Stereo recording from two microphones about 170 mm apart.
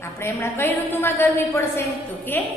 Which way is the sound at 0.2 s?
15° left (ahead or behind).